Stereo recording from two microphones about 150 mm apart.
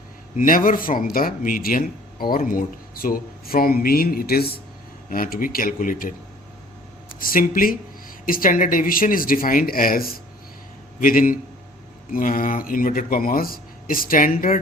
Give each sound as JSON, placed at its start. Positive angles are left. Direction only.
{"t": 0.3, "sound": "speech", "side_deg": 65}
{"t": 5.0, "sound": "speech", "side_deg": 70}
{"t": 7.2, "sound": "speech", "side_deg": 70}